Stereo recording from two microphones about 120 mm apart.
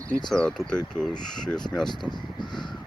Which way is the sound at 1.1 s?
35° left (ahead or behind).